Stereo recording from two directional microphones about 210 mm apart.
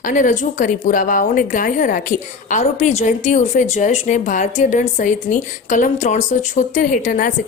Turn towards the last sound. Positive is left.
turn(degrees=40)  # may be behind; listen again after turning